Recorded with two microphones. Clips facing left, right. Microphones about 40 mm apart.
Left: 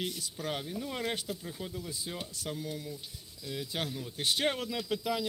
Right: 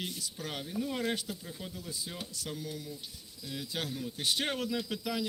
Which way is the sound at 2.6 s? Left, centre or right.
Left.